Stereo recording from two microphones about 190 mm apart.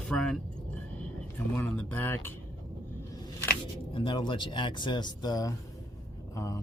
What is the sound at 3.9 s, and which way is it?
Speech, 25° left (ahead or behind).